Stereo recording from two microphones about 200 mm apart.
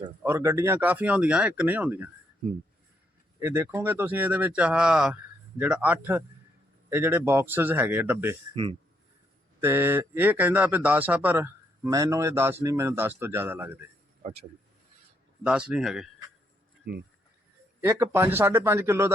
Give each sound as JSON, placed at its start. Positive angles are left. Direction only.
{"t": 0.2, "sound": "speech", "side_deg": -10}
{"t": 3.4, "sound": "speech", "side_deg": -10}
{"t": 9.6, "sound": "speech", "side_deg": -10}
{"t": 15.4, "sound": "speech", "side_deg": -5}
{"t": 16.9, "sound": "speech", "side_deg": -50}
{"t": 17.7, "sound": "speech", "side_deg": -15}